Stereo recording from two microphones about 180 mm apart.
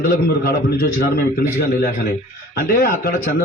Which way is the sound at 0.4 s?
55° left (ahead or behind).